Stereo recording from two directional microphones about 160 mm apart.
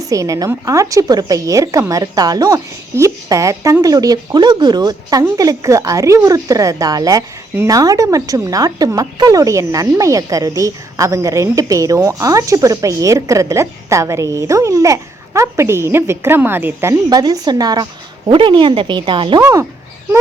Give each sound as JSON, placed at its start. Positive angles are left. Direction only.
{"t": 0.1, "sound": "a woman's voice", "side_deg": -20}